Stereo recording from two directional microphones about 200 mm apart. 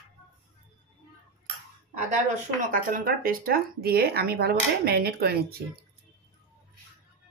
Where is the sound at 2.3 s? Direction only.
45° right (ahead or behind).